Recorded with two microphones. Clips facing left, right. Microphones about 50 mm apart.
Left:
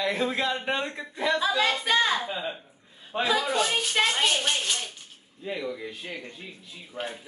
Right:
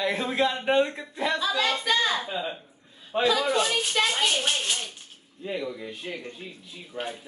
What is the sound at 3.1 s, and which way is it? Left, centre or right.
Speech, centre.